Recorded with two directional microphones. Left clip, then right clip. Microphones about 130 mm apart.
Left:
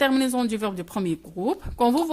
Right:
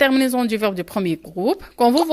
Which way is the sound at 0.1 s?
20° right (ahead or behind).